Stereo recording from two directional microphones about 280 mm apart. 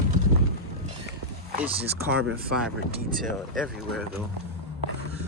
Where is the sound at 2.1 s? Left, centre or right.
Right.